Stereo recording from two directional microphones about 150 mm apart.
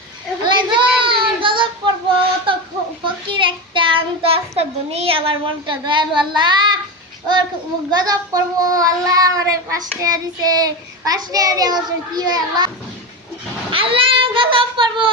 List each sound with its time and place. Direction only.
0.4 s child singing: 30° right (ahead or behind)
3.0 s a child's voice: 35° right (ahead or behind)
7.9 s speech: 25° right (ahead or behind)
13.7 s speech: 35° right (ahead or behind)